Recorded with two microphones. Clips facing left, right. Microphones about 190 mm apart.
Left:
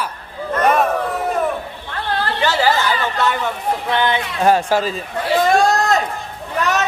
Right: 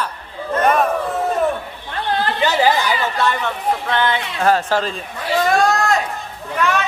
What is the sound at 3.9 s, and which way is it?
Speech, 15° left (ahead or behind).